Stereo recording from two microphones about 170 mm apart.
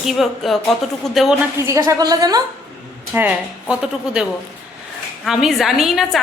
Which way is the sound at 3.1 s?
5° right (ahead or behind).